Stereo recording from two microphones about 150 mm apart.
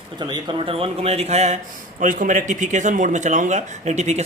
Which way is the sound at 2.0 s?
60° right (ahead or behind).